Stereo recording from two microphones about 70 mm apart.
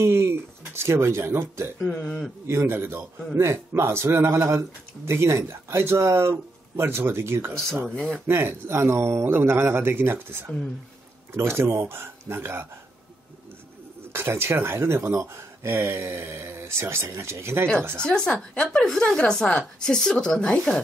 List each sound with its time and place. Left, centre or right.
0.0 s speech: right
1.8 s a woman's voice: centre
2.4 s speech: right
14.1 s speech: right
18.0 s a woman's voice: centre